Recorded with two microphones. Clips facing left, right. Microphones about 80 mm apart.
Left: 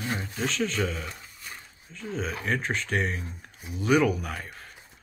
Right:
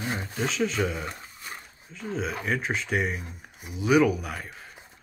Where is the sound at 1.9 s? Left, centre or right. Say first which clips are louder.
Right 2 dB; centre.